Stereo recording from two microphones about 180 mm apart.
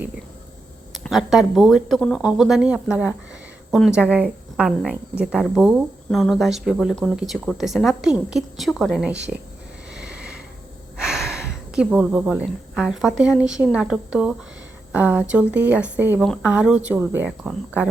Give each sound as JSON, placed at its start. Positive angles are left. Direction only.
{"t": 0.9, "sound": "speech", "side_deg": 0}
{"t": 9.9, "sound": "sniff", "side_deg": -5}
{"t": 10.9, "sound": "speech", "side_deg": -5}